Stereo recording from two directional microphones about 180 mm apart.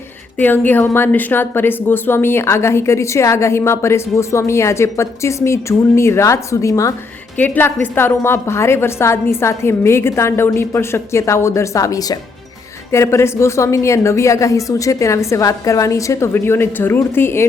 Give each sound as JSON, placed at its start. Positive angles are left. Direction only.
{"t": 0.3, "sound": "a woman's voice", "side_deg": 10}